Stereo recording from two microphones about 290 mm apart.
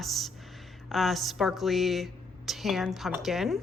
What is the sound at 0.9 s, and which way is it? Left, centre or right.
Speech, centre.